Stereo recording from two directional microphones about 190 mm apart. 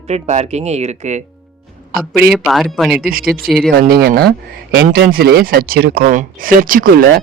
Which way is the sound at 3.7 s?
55° right (ahead or behind).